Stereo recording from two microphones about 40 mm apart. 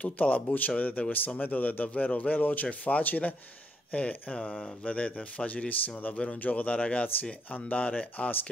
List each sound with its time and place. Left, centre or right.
0.0 s speech: left
0.5 s speech: left
2.0 s speech: left
2.3 s speech: left
4.8 s speech: left
6.1 s speech: left
6.4 s speech: left